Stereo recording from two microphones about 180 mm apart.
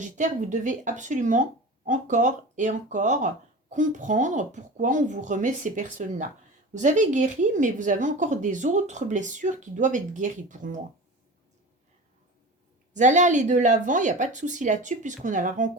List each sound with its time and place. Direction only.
0.0 s speech: 45° right (ahead or behind)
12.9 s speech: 45° right (ahead or behind)